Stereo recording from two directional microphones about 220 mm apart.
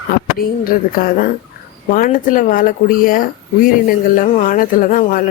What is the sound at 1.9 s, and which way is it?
A woman's voice, 40° left (ahead or behind).